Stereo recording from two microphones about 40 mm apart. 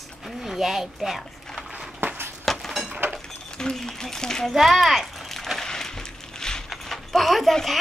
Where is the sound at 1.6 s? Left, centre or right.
Centre.